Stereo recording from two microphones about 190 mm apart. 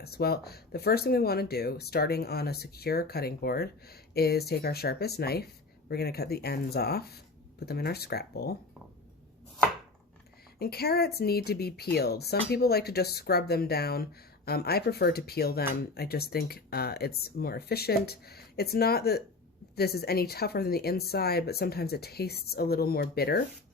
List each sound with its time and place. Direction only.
0.0 s speech: 55° left (ahead or behind)
10.6 s speech: 55° left (ahead or behind)